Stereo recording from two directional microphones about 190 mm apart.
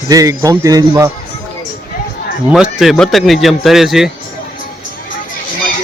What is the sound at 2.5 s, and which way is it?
Speech, 5° right (ahead or behind).